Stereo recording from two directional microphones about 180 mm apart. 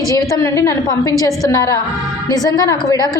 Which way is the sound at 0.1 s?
15° left (ahead or behind).